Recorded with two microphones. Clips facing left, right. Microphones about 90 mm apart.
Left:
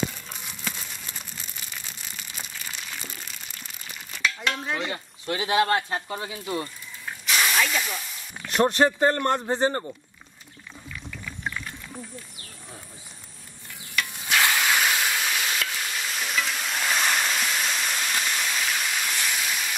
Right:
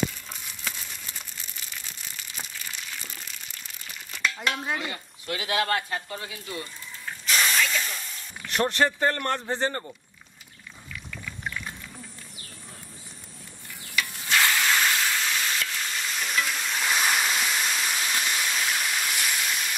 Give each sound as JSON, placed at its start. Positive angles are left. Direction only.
{"t": 4.2, "sound": "speech", "side_deg": -5}
{"t": 4.9, "sound": "speech", "side_deg": 25}
{"t": 7.2, "sound": "hiss", "side_deg": 5}
{"t": 8.5, "sound": "speech", "side_deg": 20}
{"t": 14.0, "sound": "stir", "side_deg": 15}